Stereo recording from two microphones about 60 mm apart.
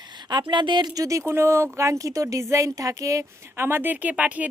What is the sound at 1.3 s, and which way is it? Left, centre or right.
Speech, right.